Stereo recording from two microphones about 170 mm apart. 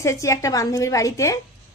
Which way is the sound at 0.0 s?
15° left (ahead or behind).